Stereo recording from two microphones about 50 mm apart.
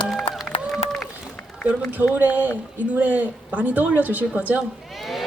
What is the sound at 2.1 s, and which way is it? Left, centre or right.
A woman's voice, right.